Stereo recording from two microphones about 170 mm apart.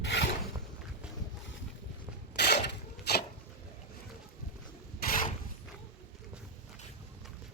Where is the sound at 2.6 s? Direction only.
70° left (ahead or behind).